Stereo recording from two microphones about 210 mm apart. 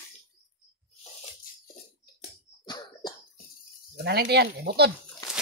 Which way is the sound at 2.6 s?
20° left (ahead or behind).